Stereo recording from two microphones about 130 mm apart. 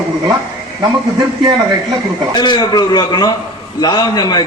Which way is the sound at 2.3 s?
35° left (ahead or behind).